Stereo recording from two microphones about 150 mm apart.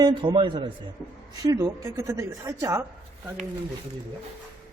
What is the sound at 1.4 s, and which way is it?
A man's voice, 20° right (ahead or behind).